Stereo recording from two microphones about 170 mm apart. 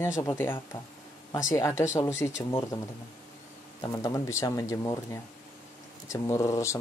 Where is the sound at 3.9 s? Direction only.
20° left (ahead or behind).